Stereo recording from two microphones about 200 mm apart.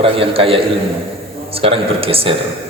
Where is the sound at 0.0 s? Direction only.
30° right (ahead or behind).